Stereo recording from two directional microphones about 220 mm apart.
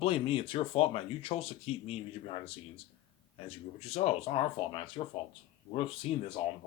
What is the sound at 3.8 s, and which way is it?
Speech, 30° left (ahead or behind).